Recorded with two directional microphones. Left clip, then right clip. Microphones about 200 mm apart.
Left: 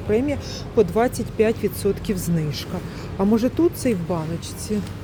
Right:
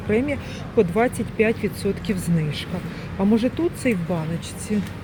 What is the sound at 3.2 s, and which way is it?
Speech, 15° left (ahead or behind).